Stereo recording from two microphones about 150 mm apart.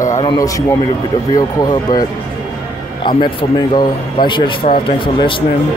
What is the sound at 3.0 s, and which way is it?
Speech, 30° left (ahead or behind).